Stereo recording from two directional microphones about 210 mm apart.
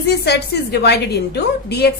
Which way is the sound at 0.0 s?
50° left (ahead or behind).